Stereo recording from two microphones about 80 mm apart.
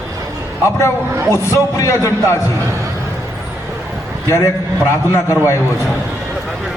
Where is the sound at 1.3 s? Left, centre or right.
Left.